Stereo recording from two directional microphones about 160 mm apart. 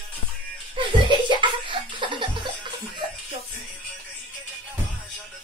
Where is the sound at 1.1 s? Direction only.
30° right (ahead or behind).